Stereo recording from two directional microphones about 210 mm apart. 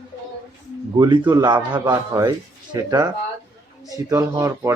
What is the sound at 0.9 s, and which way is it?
A man's voice, 20° right (ahead or behind).